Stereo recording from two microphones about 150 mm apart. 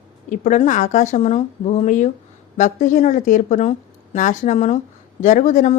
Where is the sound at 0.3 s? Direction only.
55° left (ahead or behind).